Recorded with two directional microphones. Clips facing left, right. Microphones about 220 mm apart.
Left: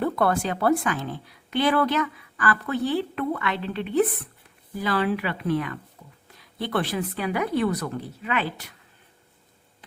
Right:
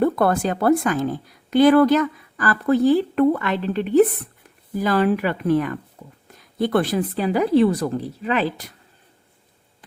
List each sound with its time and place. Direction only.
0.0 s a woman's voice: 45° right (ahead or behind)